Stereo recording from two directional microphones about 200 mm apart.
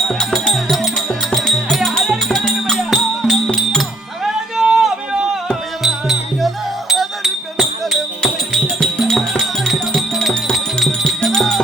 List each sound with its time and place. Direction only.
0.2 s music: 5° left (ahead or behind)
4.5 s a sound: centre (ahead or behind)
5.3 s music: centre (ahead or behind)